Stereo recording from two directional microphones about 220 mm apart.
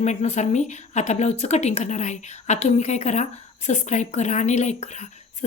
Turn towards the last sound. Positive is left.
turn(degrees=30)  # may be behind; listen again after turning